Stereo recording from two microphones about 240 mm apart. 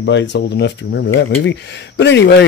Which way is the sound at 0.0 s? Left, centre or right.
Left.